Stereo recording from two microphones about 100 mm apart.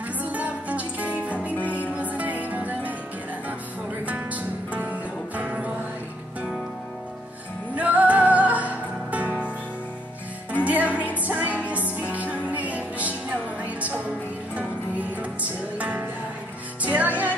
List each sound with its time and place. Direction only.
0.2 s music: 15° right (ahead or behind)
1.5 s music: 15° left (ahead or behind)
2.0 s music: 15° right (ahead or behind)
4.0 s music: 15° right (ahead or behind)
7.7 s music: 15° right (ahead or behind)
10.6 s music: 15° right (ahead or behind)